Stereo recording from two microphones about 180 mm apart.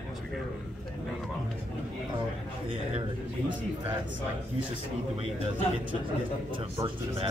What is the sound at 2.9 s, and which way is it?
Speech, 25° right (ahead or behind).